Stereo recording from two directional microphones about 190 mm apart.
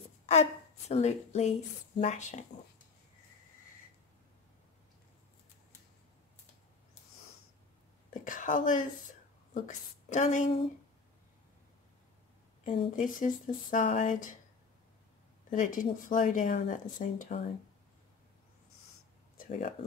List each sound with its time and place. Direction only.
0.3 s a woman's voice: 35° left (ahead or behind)
8.1 s a sound: 40° left (ahead or behind)
9.5 s a woman's voice: 40° left (ahead or behind)
12.6 s speech: 30° left (ahead or behind)
12.9 s speech: 45° left (ahead or behind)
15.5 s speech: 45° left (ahead or behind)
19.3 s a sound: 45° left (ahead or behind)